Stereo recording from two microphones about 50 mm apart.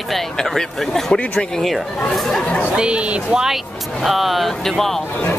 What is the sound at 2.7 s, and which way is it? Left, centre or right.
Speech, centre.